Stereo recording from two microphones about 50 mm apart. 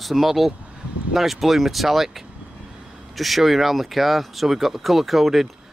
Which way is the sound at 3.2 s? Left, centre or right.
Centre.